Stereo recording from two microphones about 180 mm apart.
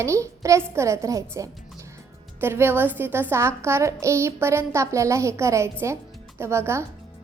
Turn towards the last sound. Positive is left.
turn(degrees=-15)  # may be behind; listen again after turning